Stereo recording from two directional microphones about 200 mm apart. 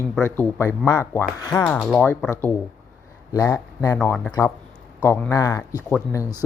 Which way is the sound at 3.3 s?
15° left (ahead or behind).